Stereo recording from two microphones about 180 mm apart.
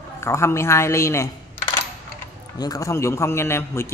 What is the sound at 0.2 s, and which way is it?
A man's voice, 15° left (ahead or behind).